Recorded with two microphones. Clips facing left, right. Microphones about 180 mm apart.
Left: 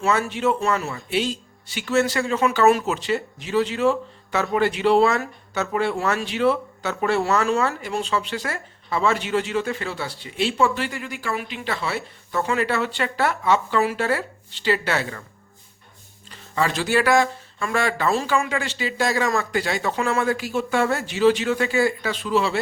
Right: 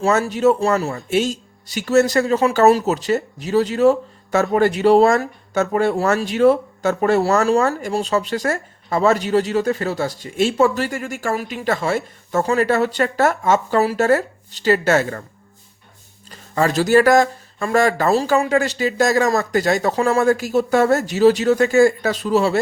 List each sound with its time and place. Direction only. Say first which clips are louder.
0.0 s speech: right 6 dB; 40° right (ahead or behind)
16.3 s speech: right 5 dB; 40° right (ahead or behind)